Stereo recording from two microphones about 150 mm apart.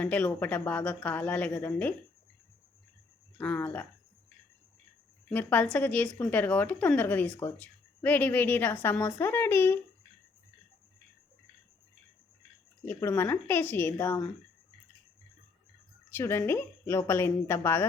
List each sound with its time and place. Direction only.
0.0 s a woman's voice: 5° left (ahead or behind)
3.3 s a woman's voice: 10° left (ahead or behind)
5.3 s a woman's voice: 10° left (ahead or behind)
12.8 s a woman's voice: 15° left (ahead or behind)
16.0 s a woman's voice: 15° left (ahead or behind)